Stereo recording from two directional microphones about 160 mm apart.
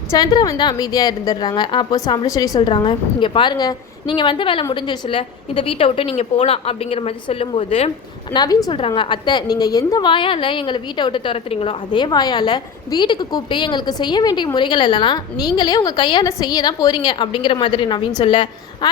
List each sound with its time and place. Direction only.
0.1 s a woman's voice: 25° left (ahead or behind)
8.3 s a woman's voice: 25° left (ahead or behind)